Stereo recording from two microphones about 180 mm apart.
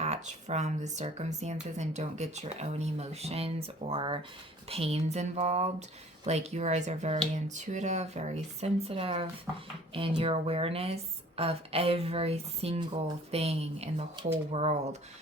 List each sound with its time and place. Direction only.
0.0 s speech: 40° right (ahead or behind)